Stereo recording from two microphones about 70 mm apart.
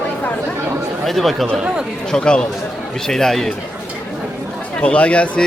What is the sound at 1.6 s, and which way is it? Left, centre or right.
Speech, centre.